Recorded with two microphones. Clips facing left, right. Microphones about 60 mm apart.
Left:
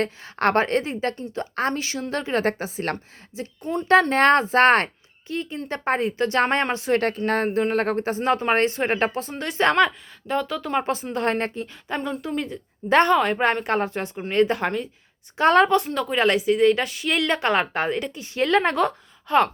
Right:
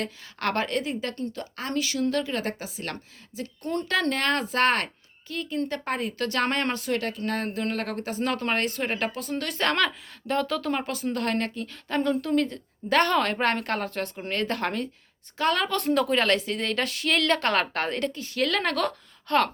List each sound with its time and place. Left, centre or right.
0.0 s a woman's voice: left
1.1 s speech: centre
1.4 s a woman's voice: left
3.6 s a woman's voice: centre
4.1 s a woman's voice: left
10.2 s speech: centre
10.8 s speech: left
11.7 s a woman's voice: centre
12.9 s a woman's voice: left
15.4 s a woman's voice: left
15.9 s speech: centre
16.1 s a woman's voice: centre
17.2 s a woman's voice: centre